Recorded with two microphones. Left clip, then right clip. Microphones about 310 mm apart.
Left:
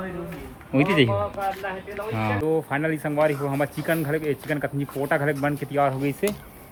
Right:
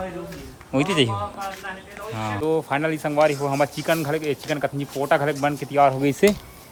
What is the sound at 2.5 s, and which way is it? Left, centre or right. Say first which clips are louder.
Speech: right 4 dB; centre.